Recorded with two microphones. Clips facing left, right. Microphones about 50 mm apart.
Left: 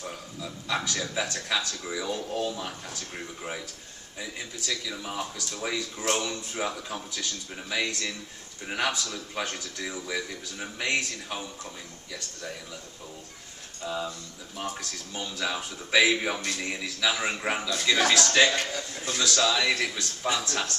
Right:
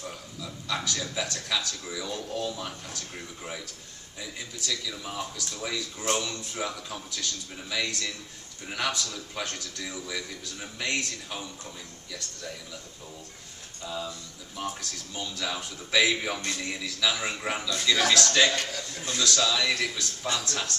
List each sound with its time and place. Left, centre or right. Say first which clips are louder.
0.4 s speech: left 2 dB; centre
4.2 s a man's voice: left 1 dB; centre
13.8 s a man's voice: left 3 dB; centre